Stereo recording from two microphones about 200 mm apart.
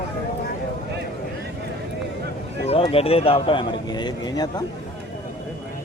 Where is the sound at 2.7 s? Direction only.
30° left (ahead or behind).